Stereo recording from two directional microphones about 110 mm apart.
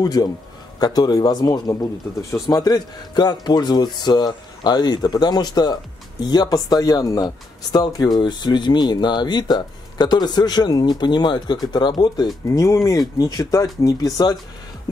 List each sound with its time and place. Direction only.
0.0 s speech: 35° left (ahead or behind)
12.4 s speech: 30° left (ahead or behind)